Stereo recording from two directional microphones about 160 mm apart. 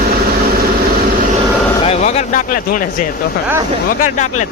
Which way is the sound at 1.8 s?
40° left (ahead or behind).